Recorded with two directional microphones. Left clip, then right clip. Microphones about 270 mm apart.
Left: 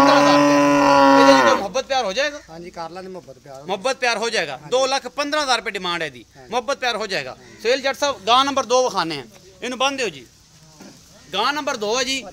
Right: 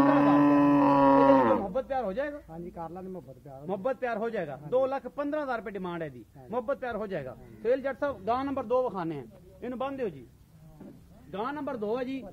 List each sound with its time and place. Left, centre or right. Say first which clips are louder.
0.0 s a sound: left 10 dB; right
1.7 s speech: left 9 dB; centre
3.6 s a man's voice: left 10 dB; left
11.3 s a man's voice: left 13 dB; left